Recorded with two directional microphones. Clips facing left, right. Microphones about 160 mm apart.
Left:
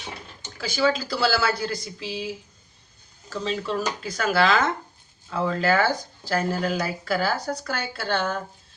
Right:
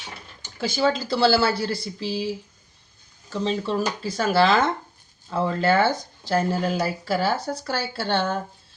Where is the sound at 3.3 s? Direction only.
25° right (ahead or behind).